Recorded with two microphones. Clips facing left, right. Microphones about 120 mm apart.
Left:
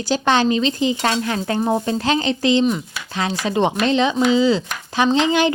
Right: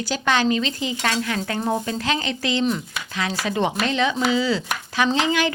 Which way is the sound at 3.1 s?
30° left (ahead or behind).